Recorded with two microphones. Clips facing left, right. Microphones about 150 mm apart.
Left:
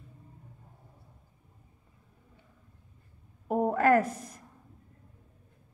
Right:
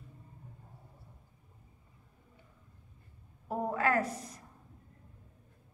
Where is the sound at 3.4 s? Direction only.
50° left (ahead or behind).